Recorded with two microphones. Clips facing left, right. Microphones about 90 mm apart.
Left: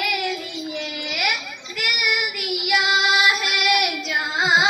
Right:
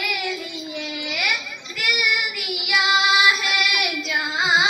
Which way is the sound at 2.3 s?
50° left (ahead or behind).